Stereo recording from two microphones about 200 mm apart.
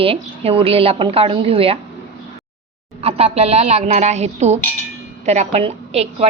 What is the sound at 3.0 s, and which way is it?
A woman's voice, 30° right (ahead or behind).